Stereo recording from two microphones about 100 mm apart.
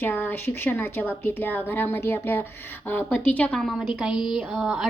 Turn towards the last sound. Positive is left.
turn(degrees=0)  # may be behind; listen again after turning